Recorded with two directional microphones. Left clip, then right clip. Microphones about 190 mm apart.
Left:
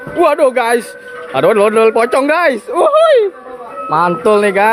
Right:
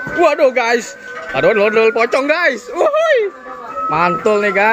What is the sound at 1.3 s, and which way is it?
Speech, 30° left (ahead or behind).